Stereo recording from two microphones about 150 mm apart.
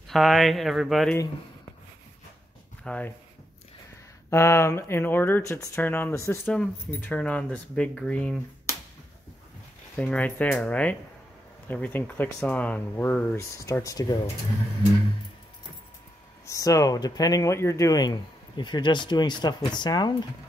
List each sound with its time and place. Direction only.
0.1 s speech: centre (ahead or behind)
2.8 s speech: 10° left (ahead or behind)
4.3 s speech: 20° left (ahead or behind)
9.9 s speech: 10° left (ahead or behind)
16.4 s speech: 20° left (ahead or behind)